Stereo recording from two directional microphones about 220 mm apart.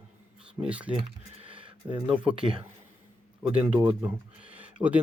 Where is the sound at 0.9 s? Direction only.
25° right (ahead or behind).